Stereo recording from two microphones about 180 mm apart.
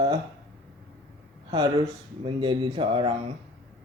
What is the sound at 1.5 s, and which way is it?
Speech, 25° right (ahead or behind).